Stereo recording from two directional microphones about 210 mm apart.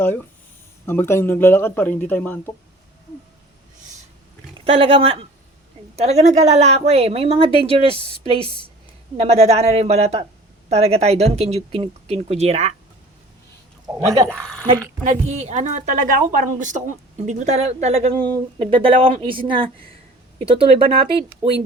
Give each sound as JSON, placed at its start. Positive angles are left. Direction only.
{"t": 0.9, "sound": "speech", "side_deg": 10}
{"t": 4.5, "sound": "a woman's voice", "side_deg": -25}
{"t": 8.4, "sound": "a woman's voice", "side_deg": 25}
{"t": 9.1, "sound": "a woman's voice", "side_deg": -30}
{"t": 14.3, "sound": "speech", "side_deg": 5}
{"t": 15.0, "sound": "a woman's voice", "side_deg": -35}